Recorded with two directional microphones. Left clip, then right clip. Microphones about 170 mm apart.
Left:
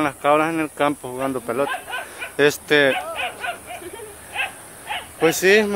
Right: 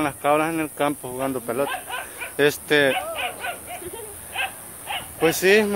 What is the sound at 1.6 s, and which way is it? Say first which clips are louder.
Speech: left 2 dB; 60° left (ahead or behind).